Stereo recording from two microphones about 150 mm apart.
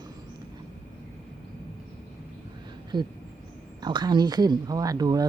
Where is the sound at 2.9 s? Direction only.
30° right (ahead or behind).